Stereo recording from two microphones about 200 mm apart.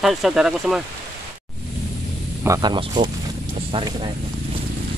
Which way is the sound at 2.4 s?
20° right (ahead or behind).